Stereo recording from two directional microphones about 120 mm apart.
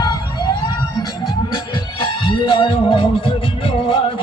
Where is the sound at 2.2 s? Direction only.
40° left (ahead or behind).